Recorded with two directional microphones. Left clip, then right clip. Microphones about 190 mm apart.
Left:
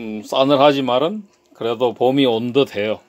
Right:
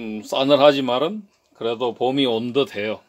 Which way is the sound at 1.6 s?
20° left (ahead or behind).